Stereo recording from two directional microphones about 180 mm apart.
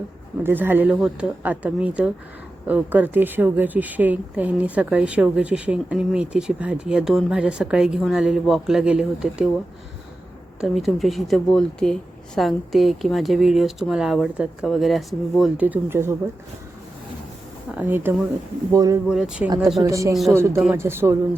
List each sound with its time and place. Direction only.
0.4 s speech: 10° right (ahead or behind)
10.6 s speech: centre (ahead or behind)
17.7 s speech: 10° right (ahead or behind)
19.0 s speech: 5° right (ahead or behind)
19.8 s speech: 15° right (ahead or behind)